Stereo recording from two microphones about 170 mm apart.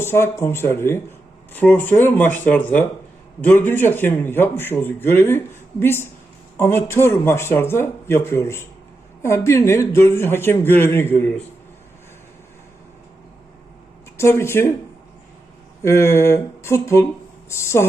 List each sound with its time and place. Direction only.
0.0 s a man's voice: 15° left (ahead or behind)
14.2 s a man's voice: 15° left (ahead or behind)
15.8 s a man's voice: 15° left (ahead or behind)